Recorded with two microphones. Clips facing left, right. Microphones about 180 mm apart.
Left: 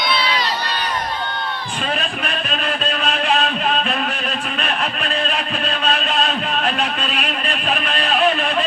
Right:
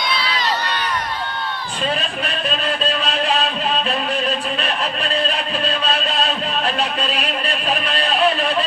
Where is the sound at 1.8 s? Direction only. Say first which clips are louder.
Right 2 dB; 30° right (ahead or behind).